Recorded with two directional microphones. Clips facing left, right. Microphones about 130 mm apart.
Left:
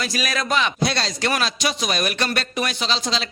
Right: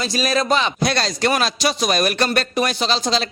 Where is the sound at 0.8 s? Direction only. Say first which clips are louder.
Right 3 dB; 50° right (ahead or behind).